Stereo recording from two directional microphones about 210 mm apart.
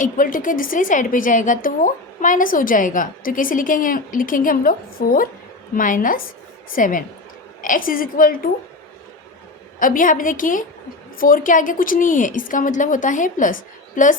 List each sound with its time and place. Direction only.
0.0 s a woman's voice: 40° left (ahead or behind)
9.8 s a woman's voice: 40° left (ahead or behind)